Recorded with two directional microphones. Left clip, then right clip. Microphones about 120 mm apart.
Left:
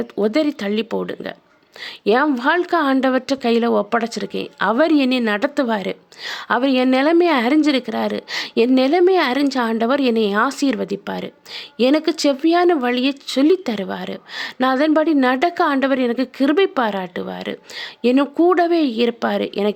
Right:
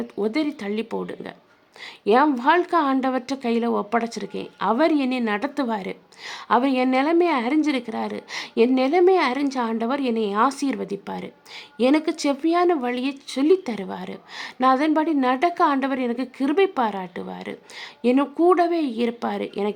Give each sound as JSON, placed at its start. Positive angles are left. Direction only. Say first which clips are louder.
{"t": 0.0, "sound": "a woman's voice", "louder": "left 6 dB", "side_deg": 30}